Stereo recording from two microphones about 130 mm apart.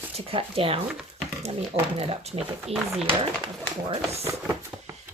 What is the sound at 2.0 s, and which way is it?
Speech, 50° right (ahead or behind).